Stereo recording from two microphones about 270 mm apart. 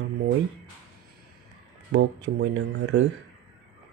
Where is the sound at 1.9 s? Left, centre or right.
Right.